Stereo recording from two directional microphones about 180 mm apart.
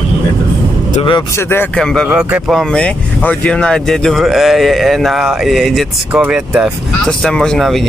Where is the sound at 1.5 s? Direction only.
5° left (ahead or behind).